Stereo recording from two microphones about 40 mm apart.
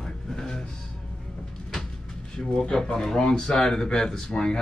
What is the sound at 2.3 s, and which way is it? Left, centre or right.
Speech, centre.